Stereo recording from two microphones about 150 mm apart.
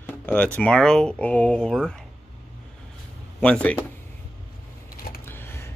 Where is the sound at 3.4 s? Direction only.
10° left (ahead or behind).